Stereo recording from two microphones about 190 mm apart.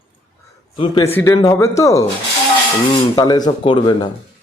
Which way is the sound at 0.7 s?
30° left (ahead or behind).